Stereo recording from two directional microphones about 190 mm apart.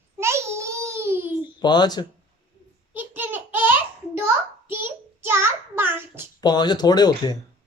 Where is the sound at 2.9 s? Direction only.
10° right (ahead or behind).